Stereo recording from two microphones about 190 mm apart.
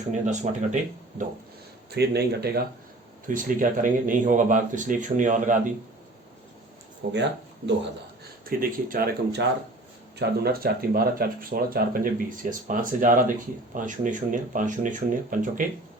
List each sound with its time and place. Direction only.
0.1 s speech: 40° right (ahead or behind)
1.9 s speech: 60° right (ahead or behind)
3.2 s speech: 45° right (ahead or behind)
7.0 s speech: 60° right (ahead or behind)
8.4 s speech: 50° right (ahead or behind)